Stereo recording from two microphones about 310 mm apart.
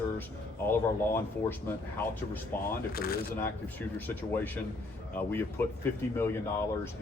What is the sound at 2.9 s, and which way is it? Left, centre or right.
Speech, left.